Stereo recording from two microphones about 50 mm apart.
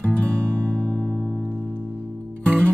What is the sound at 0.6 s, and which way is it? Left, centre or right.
Music, right.